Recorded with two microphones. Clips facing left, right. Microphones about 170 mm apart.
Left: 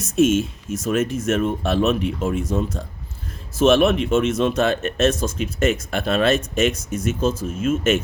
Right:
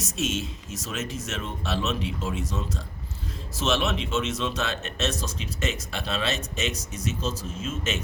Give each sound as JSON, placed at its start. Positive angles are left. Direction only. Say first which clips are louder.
{"t": 0.0, "sound": "speech", "louder": "left 12 dB", "side_deg": 55}